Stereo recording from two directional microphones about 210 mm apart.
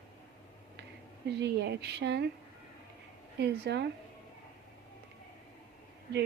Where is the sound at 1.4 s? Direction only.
55° right (ahead or behind).